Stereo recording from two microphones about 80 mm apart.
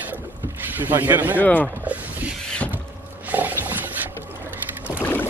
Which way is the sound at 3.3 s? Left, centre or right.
Right.